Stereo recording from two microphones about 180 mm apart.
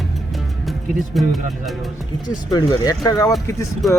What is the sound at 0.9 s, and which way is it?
Speech, centre (ahead or behind).